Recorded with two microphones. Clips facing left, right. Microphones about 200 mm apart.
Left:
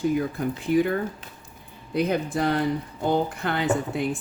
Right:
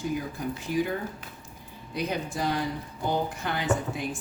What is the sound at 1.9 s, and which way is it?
Speech, 55° left (ahead or behind).